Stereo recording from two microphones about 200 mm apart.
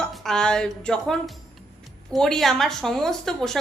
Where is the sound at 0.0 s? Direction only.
5° left (ahead or behind).